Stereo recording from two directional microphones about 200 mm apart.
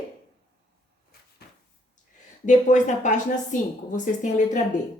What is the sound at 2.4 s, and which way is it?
A woman's voice, 40° left (ahead or behind).